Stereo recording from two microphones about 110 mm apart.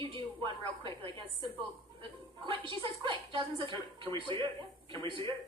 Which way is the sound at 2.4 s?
50° right (ahead or behind).